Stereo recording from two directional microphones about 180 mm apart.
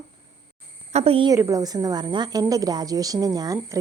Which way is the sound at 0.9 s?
30° right (ahead or behind).